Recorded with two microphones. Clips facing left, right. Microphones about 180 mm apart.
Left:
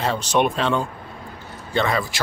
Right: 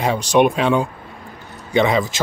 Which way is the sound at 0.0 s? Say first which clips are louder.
Right 5 dB; 10° right (ahead or behind).